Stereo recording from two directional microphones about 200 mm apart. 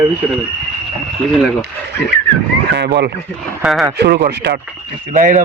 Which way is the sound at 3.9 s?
55° right (ahead or behind).